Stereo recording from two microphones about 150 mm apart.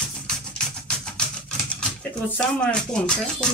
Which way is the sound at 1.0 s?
5° left (ahead or behind).